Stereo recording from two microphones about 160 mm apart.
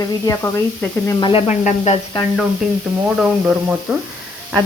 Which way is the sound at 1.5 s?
45° left (ahead or behind).